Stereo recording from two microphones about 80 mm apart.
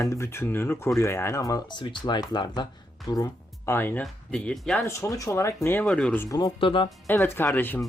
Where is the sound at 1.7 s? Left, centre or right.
Left.